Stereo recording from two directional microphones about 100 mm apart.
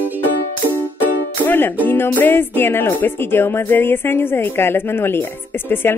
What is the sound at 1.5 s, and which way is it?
Speech, 20° left (ahead or behind).